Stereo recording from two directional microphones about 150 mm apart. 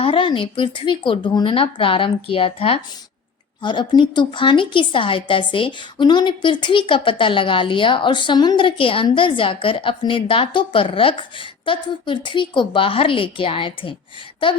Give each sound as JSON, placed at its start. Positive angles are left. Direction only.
{"t": 0.0, "sound": "a woman's voice", "side_deg": 35}